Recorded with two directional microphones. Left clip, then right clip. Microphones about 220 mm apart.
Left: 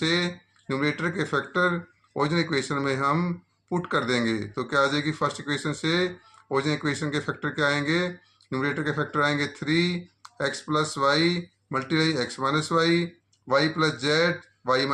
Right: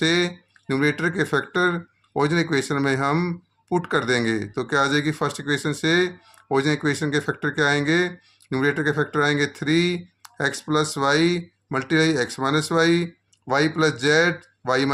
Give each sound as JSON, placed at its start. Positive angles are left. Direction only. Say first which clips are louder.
{"t": 0.0, "sound": "speech", "louder": "right 4 dB", "side_deg": -55}